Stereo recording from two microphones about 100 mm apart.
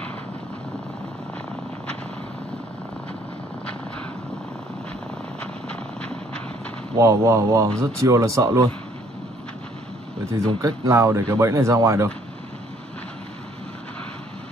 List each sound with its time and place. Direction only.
5.4 s vehicle: 10° left (ahead or behind)
7.0 s speech: 30° right (ahead or behind)
10.3 s speech: 35° right (ahead or behind)